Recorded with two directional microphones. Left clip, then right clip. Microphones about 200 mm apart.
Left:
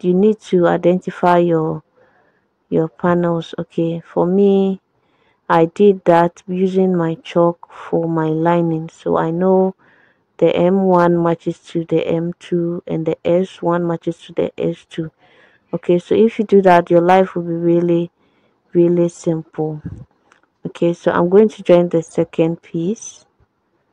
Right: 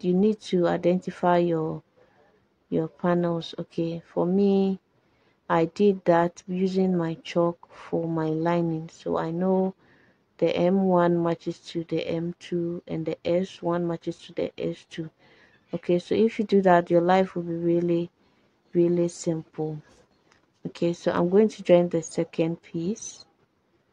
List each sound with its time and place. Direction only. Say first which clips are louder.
0.0 s speech: left 10 dB; 25° left (ahead or behind)